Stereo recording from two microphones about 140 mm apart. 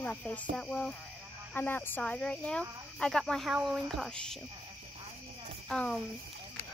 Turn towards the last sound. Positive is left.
turn(degrees=5)  # may be behind; listen again after turning